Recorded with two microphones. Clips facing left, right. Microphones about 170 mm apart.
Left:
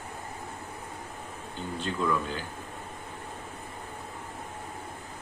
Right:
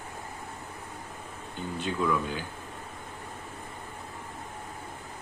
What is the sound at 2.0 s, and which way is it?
Speech, 5° right (ahead or behind).